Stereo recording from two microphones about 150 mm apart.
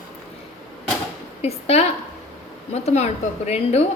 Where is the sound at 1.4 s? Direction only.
45° left (ahead or behind).